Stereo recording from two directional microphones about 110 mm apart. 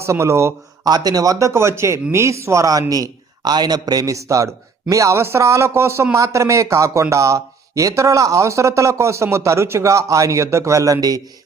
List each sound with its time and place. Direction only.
0.0 s a man's voice: 25° right (ahead or behind)
0.9 s a man's voice: 35° right (ahead or behind)